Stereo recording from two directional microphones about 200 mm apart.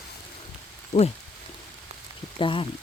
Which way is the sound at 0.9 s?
35° left (ahead or behind).